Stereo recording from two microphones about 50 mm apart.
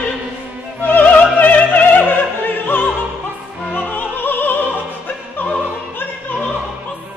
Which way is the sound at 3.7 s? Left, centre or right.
Left.